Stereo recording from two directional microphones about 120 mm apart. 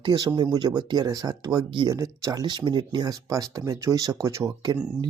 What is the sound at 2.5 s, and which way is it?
Speech, 40° right (ahead or behind).